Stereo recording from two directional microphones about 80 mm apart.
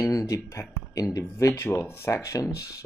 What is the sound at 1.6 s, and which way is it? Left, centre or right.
Speech, left.